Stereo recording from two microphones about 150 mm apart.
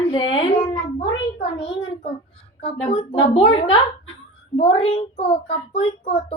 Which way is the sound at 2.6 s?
40° left (ahead or behind).